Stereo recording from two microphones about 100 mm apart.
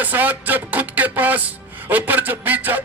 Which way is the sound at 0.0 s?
15° right (ahead or behind).